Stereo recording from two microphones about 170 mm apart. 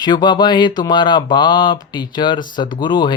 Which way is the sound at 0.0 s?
25° left (ahead or behind).